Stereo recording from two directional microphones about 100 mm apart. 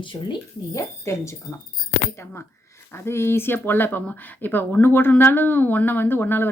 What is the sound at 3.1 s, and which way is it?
Speech, 25° left (ahead or behind).